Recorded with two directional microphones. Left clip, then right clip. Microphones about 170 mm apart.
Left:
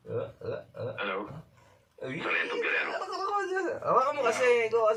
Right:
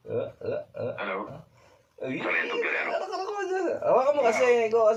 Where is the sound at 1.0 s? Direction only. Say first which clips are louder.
Left 1 dB; 25° right (ahead or behind).